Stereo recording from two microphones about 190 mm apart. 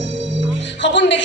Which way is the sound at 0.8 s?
70° left (ahead or behind).